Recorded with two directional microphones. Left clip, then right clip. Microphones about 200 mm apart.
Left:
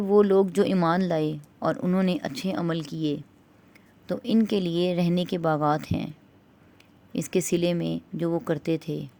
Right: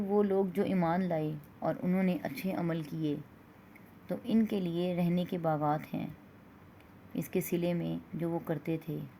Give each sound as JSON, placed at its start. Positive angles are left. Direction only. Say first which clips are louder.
{"t": 0.1, "sound": "speech", "louder": "left 10 dB", "side_deg": 60}
{"t": 4.1, "sound": "speech", "louder": "left 8 dB", "side_deg": 45}
{"t": 7.1, "sound": "speech", "louder": "left 8 dB", "side_deg": 45}